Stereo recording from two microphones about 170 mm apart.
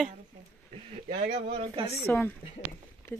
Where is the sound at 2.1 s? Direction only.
15° left (ahead or behind).